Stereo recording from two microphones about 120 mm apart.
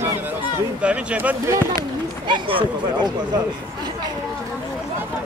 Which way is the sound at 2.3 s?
45° right (ahead or behind).